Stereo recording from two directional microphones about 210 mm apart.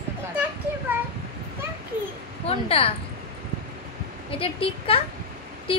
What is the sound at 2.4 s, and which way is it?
Speech, 30° left (ahead or behind).